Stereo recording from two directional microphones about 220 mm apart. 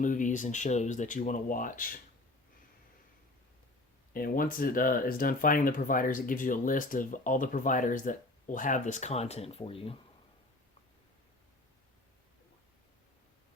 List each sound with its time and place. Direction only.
0.0 s speech: 35° left (ahead or behind)
4.1 s speech: 40° left (ahead or behind)